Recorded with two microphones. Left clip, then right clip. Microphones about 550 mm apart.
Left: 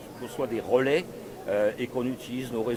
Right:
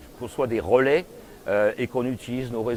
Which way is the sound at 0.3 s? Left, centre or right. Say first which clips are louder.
Right 5 dB; right.